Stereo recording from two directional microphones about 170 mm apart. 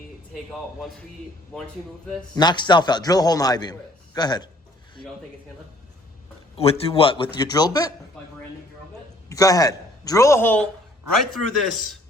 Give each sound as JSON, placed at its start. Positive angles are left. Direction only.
{"t": 0.8, "sound": "a man's voice", "side_deg": 0}
{"t": 2.3, "sound": "a man's voice", "side_deg": 25}
{"t": 6.6, "sound": "a man's voice", "side_deg": 35}
{"t": 9.3, "sound": "a man's voice", "side_deg": 20}